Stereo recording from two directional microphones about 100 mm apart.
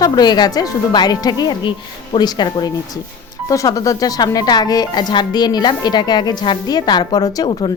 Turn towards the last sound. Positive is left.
turn(degrees=40)  # may be behind; listen again after turning